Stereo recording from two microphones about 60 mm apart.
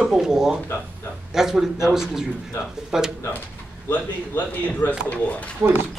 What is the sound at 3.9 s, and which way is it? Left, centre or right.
A man's voice, left.